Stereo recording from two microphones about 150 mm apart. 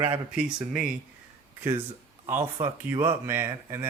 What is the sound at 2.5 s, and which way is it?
Speech, 20° right (ahead or behind).